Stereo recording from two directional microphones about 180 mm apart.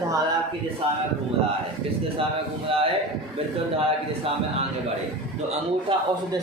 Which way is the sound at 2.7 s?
30° right (ahead or behind).